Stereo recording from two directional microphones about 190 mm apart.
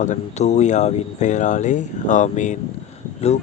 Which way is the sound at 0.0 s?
40° left (ahead or behind).